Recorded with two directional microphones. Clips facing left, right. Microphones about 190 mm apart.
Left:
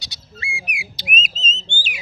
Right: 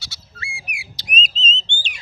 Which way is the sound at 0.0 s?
15° left (ahead or behind).